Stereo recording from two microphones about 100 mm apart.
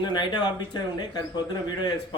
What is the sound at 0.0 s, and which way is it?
A man's voice, 45° left (ahead or behind).